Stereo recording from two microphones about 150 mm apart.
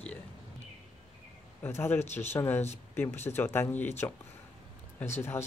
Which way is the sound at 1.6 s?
15° left (ahead or behind).